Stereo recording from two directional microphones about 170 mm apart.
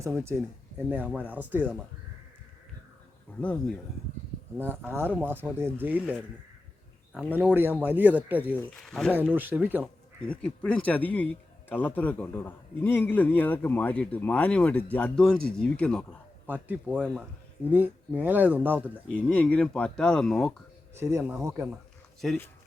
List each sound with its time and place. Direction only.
0.0 s speech: 15° right (ahead or behind)
4.5 s speech: 10° right (ahead or behind)
7.3 s speech: 10° right (ahead or behind)
8.5 s speech: centre (ahead or behind)
9.1 s speech: 10° right (ahead or behind)
10.2 s a man's voice: 5° left (ahead or behind)
16.5 s speech: 10° right (ahead or behind)
19.0 s speech: 5° left (ahead or behind)
20.9 s speech: 15° right (ahead or behind)